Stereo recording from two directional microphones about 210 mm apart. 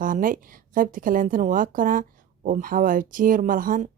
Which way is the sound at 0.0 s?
40° right (ahead or behind).